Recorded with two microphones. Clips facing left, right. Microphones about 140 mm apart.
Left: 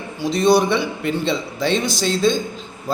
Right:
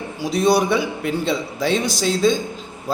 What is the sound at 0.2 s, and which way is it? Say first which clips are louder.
A man's voice: left 2 dB; 10° right (ahead or behind).